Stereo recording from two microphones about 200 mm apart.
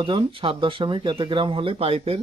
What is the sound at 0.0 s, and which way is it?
Speech, 25° right (ahead or behind).